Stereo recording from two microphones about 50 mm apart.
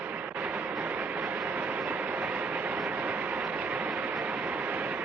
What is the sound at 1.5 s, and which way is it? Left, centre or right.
Vehicle, right.